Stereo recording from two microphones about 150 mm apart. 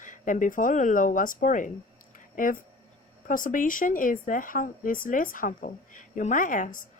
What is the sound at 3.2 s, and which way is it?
A woman's voice, 65° left (ahead or behind).